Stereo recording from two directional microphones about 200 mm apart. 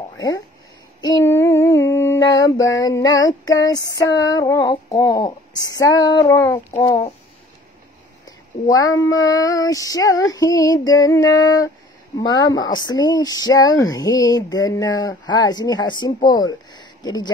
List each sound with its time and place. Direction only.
1.0 s child singing: 15° left (ahead or behind)
2.8 s speech: 20° left (ahead or behind)
8.3 s child singing: 20° left (ahead or behind)
12.2 s speech: 20° left (ahead or behind)